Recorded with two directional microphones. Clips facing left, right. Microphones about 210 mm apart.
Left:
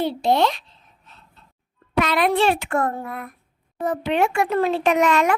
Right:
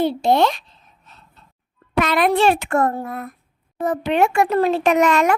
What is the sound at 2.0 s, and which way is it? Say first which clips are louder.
A child's voice: right 2 dB; 50° right (ahead or behind).